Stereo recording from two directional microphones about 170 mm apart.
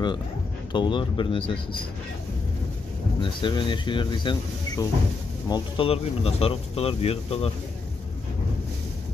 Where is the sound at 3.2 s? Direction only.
30° left (ahead or behind).